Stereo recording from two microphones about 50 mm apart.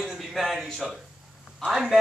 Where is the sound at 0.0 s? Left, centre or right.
Centre.